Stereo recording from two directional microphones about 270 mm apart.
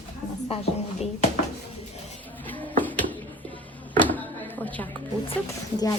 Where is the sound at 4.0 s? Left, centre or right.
Centre.